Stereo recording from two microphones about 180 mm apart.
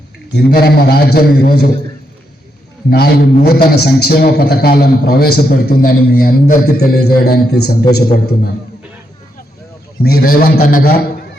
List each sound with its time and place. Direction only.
0.3 s a man's voice: 60° left (ahead or behind)
2.9 s a man's voice: 60° left (ahead or behind)
10.0 s a man's voice: 60° left (ahead or behind)